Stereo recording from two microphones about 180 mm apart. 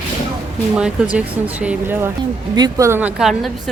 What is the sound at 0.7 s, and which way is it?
Speech, 5° right (ahead or behind).